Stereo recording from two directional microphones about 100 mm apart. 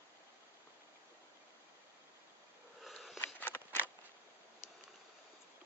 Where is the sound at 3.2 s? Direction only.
20° left (ahead or behind).